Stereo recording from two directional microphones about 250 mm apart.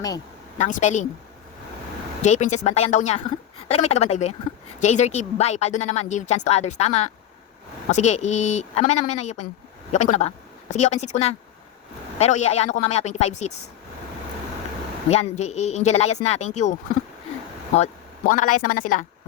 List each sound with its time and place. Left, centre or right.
0.6 s speech: left
2.2 s speech: left
15.1 s speech: left
18.3 s speech: left